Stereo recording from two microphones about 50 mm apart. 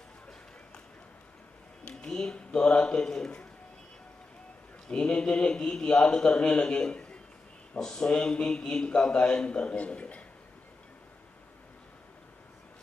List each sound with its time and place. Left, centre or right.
1.9 s a man's voice: centre
4.8 s a man's voice: left